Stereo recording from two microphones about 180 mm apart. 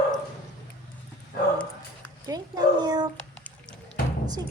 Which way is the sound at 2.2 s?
20° right (ahead or behind).